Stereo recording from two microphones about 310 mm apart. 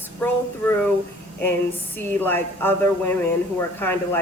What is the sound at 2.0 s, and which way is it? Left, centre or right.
Speech, centre.